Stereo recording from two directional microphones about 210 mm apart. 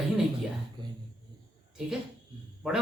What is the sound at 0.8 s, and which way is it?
Speech, 20° right (ahead or behind).